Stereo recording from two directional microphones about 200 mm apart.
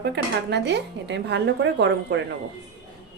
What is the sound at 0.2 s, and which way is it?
A woman's voice, 60° right (ahead or behind).